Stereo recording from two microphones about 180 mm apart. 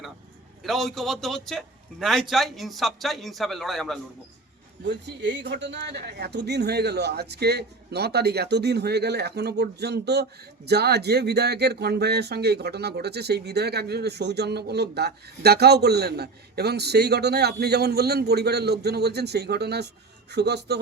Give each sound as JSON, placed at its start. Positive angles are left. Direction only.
{"t": 0.6, "sound": "a man's voice", "side_deg": 0}
{"t": 4.9, "sound": "speech", "side_deg": -75}